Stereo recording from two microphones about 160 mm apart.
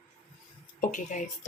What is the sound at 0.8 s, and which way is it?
Speech, 50° left (ahead or behind).